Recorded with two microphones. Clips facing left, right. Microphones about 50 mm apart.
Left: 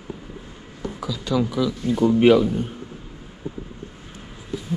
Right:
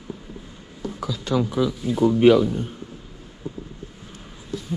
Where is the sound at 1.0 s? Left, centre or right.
Right.